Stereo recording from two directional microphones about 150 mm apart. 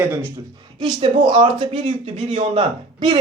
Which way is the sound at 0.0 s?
15° right (ahead or behind).